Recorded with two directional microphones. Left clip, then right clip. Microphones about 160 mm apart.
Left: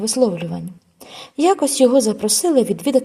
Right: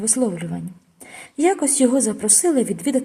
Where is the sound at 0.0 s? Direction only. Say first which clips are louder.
Left 5 dB; 20° left (ahead or behind).